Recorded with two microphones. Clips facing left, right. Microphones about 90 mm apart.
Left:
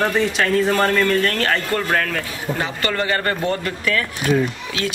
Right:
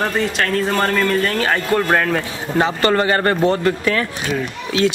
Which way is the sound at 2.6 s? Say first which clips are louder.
Right 9 dB; 35° right (ahead or behind).